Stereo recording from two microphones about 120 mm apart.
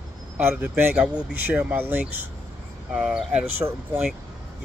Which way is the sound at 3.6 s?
30° right (ahead or behind).